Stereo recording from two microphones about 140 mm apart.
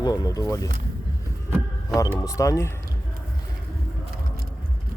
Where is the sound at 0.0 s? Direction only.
25° left (ahead or behind).